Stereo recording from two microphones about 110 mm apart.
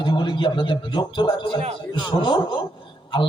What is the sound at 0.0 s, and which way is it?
A man's voice, 45° left (ahead or behind).